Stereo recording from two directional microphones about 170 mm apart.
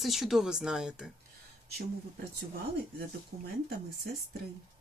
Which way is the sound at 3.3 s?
60° right (ahead or behind).